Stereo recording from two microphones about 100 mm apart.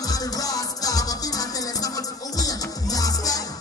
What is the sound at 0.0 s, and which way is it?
Music, 35° left (ahead or behind).